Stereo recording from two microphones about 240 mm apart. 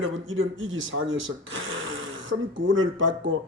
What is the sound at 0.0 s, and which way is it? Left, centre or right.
Speech, right.